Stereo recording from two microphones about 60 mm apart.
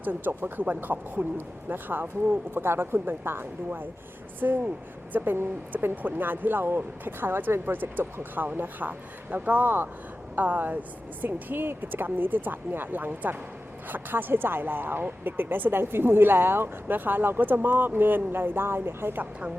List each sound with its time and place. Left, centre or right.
0.0 s speech: right